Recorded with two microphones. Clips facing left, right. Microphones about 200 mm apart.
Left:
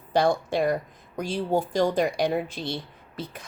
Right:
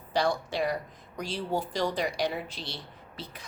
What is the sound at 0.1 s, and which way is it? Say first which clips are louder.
Speech: left 6 dB; 50° left (ahead or behind).